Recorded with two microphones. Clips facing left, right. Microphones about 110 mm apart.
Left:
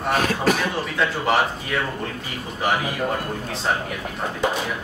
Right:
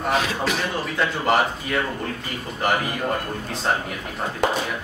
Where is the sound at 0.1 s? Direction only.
50° left (ahead or behind).